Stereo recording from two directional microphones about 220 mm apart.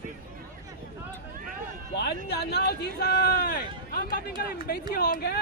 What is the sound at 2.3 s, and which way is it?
Speech, 45° left (ahead or behind).